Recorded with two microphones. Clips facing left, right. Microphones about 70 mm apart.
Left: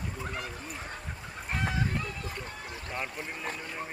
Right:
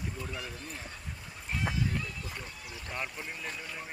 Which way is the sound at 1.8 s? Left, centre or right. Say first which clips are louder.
Left 2 dB; left.